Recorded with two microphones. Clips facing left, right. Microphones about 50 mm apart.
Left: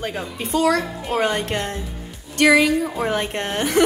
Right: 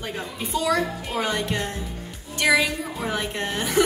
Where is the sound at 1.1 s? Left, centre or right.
Left.